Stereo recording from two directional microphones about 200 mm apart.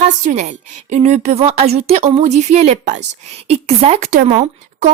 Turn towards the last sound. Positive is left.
turn(degrees=-35)  # may be behind; listen again after turning